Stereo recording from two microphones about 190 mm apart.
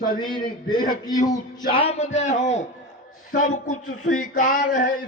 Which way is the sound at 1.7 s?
30° left (ahead or behind).